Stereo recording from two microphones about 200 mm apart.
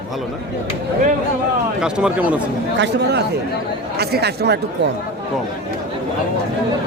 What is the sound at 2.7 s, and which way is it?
Speech, 60° right (ahead or behind).